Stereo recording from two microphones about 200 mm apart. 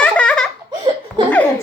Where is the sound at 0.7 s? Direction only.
20° right (ahead or behind).